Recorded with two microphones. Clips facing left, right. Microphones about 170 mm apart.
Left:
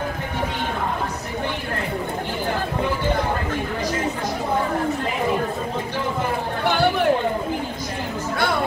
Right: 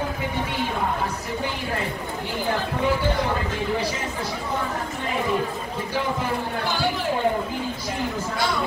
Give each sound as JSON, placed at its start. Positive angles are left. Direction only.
{"t": 6.6, "sound": "chatter", "side_deg": 60}